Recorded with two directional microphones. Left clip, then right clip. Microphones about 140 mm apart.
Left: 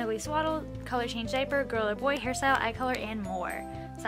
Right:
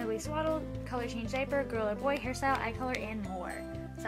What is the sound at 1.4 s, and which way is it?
Speech, 35° left (ahead or behind).